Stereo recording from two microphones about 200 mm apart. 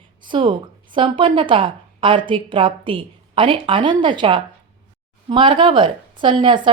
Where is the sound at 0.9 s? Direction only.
25° right (ahead or behind).